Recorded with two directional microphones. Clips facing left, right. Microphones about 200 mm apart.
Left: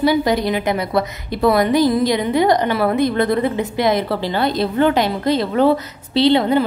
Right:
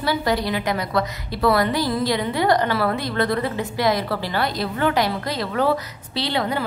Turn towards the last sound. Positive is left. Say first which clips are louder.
# left 10 dB
turn(degrees=25)  # may be behind; listen again after turning